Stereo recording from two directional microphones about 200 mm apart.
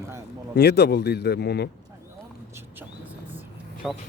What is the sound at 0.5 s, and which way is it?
A man's voice, 55° left (ahead or behind).